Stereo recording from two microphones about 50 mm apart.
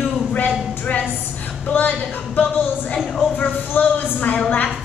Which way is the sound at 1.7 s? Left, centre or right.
Left.